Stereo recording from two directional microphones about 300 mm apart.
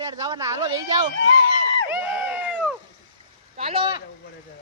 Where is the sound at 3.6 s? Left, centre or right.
Centre.